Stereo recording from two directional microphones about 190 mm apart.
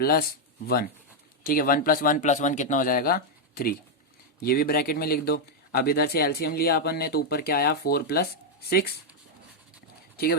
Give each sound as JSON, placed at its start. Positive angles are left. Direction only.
{"t": 0.0, "sound": "speech", "side_deg": 50}
{"t": 1.5, "sound": "speech", "side_deg": 50}